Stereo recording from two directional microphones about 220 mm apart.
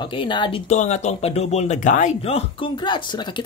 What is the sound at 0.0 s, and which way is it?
Speech, 20° left (ahead or behind).